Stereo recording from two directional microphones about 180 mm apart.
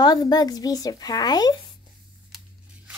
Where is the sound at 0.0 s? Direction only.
20° left (ahead or behind).